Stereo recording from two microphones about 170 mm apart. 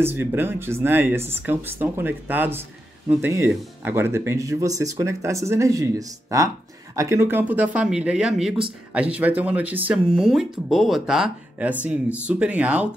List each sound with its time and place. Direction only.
0.0 s speech: 15° right (ahead or behind)